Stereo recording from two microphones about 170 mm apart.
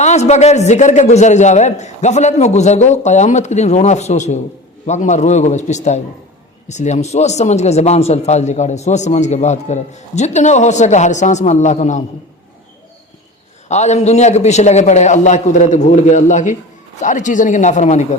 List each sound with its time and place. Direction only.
0.0 s speech: 40° left (ahead or behind)
13.7 s speech: 40° left (ahead or behind)